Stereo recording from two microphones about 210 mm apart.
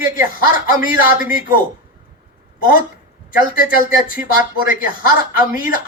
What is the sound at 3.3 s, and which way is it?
Speech, 40° left (ahead or behind).